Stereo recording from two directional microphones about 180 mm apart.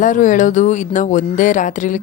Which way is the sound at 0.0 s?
45° left (ahead or behind).